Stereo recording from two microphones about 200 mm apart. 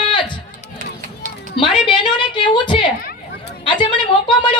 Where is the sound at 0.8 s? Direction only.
40° right (ahead or behind).